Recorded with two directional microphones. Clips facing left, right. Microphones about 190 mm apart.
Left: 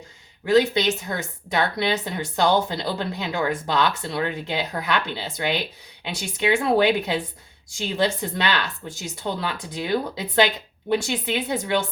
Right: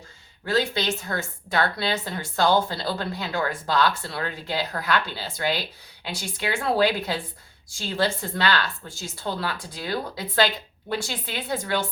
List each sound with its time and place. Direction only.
0.4 s speech: 20° left (ahead or behind)